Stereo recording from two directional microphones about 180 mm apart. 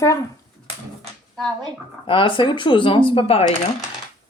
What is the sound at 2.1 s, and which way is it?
A woman's voice, 30° left (ahead or behind).